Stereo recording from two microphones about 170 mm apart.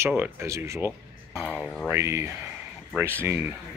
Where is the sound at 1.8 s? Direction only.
15° right (ahead or behind).